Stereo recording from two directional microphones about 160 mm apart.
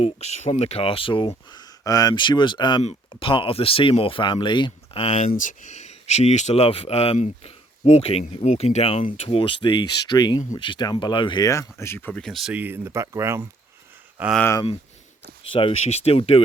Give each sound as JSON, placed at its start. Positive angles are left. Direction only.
{"t": 0.0, "sound": "speech", "side_deg": 40}
{"t": 1.3, "sound": "speech", "side_deg": 20}
{"t": 4.9, "sound": "speech", "side_deg": 45}
{"t": 15.5, "sound": "speech", "side_deg": 40}